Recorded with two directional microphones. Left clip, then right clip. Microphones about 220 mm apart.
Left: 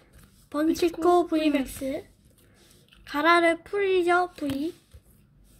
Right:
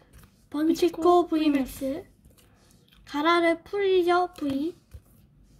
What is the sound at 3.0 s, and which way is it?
Speech, centre (ahead or behind).